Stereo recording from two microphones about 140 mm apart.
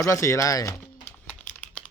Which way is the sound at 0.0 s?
20° left (ahead or behind).